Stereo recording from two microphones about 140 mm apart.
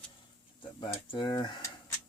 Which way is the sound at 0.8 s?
35° left (ahead or behind).